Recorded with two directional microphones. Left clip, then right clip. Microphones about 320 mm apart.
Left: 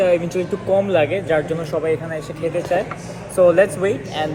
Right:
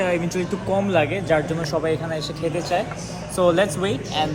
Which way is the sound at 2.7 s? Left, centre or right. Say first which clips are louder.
Left 3 dB; centre.